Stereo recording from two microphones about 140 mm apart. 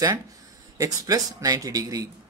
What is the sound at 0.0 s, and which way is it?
A man's voice, 25° right (ahead or behind).